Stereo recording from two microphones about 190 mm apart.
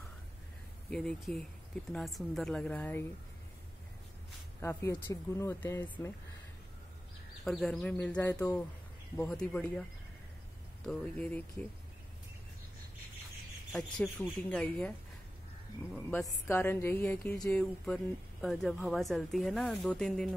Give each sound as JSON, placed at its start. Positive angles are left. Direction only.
{"t": 0.8, "sound": "speech", "side_deg": 5}
{"t": 4.6, "sound": "speech", "side_deg": 15}
{"t": 7.4, "sound": "speech", "side_deg": 5}
{"t": 10.9, "sound": "speech", "side_deg": 5}
{"t": 13.7, "sound": "speech", "side_deg": 5}